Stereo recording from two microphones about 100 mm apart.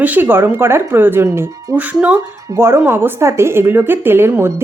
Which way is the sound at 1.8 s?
15° right (ahead or behind).